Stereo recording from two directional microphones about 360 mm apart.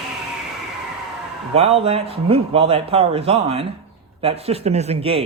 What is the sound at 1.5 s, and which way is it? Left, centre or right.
Speech, centre.